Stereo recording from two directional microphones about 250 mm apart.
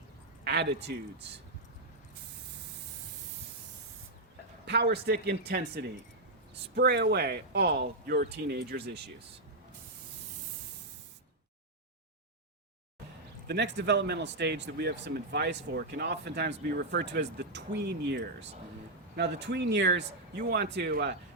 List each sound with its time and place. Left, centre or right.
0.4 s speech: right
4.6 s speech: right
13.5 s speech: right